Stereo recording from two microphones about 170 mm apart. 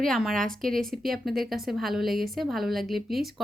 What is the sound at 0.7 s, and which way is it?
Speech, 60° right (ahead or behind).